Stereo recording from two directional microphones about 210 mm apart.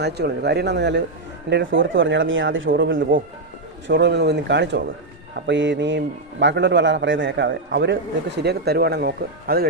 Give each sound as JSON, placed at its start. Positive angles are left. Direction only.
{"t": 0.0, "sound": "a man's voice", "side_deg": -50}